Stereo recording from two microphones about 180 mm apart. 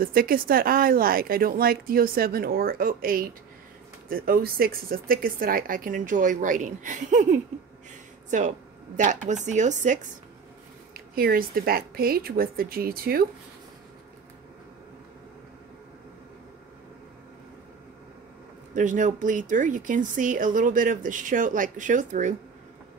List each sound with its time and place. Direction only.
0.0 s speech: 55° right (ahead or behind)
10.9 s speech: 55° right (ahead or behind)
18.8 s speech: 45° right (ahead or behind)